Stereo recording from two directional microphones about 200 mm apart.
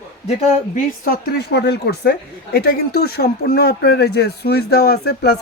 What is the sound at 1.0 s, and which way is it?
A woman's voice, 50° left (ahead or behind).